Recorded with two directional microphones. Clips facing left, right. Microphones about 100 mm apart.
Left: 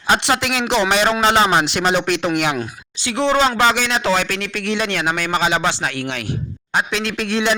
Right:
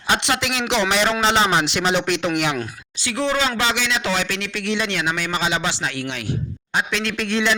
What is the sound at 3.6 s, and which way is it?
A man's voice, 45° left (ahead or behind).